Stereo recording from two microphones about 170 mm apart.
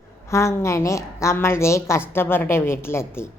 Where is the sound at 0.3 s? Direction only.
15° left (ahead or behind).